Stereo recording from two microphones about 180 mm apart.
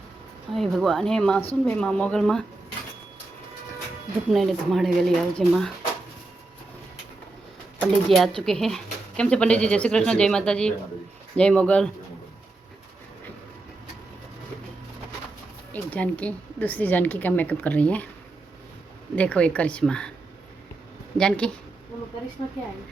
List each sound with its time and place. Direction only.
0.5 s speech: centre (ahead or behind)
4.3 s speech: centre (ahead or behind)
7.8 s speech: centre (ahead or behind)
15.7 s a woman's voice: 10° left (ahead or behind)
19.1 s a woman's voice: 5° left (ahead or behind)
21.2 s speech: 5° left (ahead or behind)